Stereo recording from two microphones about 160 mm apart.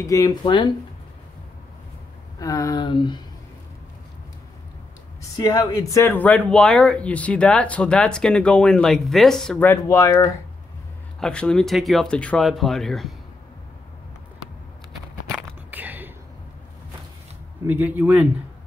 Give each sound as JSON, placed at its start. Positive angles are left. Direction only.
{"t": 0.0, "sound": "speech", "side_deg": 20}
{"t": 2.4, "sound": "speech", "side_deg": 20}
{"t": 5.4, "sound": "speech", "side_deg": 20}
{"t": 11.1, "sound": "speech", "side_deg": 5}
{"t": 15.7, "sound": "a sound", "side_deg": -10}
{"t": 17.6, "sound": "speech", "side_deg": -10}